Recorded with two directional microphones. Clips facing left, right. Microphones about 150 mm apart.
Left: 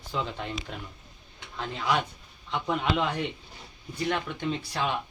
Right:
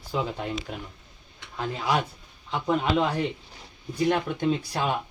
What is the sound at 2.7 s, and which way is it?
Speech, centre (ahead or behind).